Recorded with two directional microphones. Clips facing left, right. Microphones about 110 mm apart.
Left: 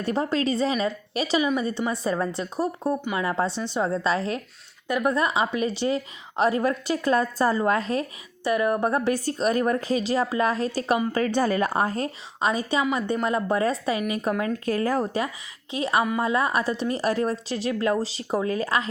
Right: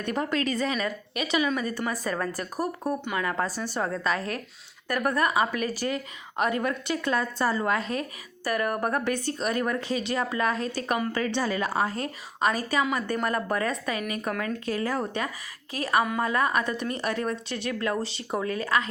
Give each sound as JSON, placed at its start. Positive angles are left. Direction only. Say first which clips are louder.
{"t": 0.0, "sound": "a woman's voice", "louder": "left 3 dB", "side_deg": 30}
{"t": 3.0, "sound": "speech", "louder": "left 2 dB", "side_deg": 10}
{"t": 3.2, "sound": "a woman's voice", "louder": "left 3 dB", "side_deg": 25}
{"t": 8.4, "sound": "a woman's voice", "louder": "left 4 dB", "side_deg": 20}
{"t": 14.6, "sound": "a woman's voice", "louder": "left 4 dB", "side_deg": 40}
{"t": 15.7, "sound": "a woman's voice", "louder": "left 2 dB", "side_deg": 25}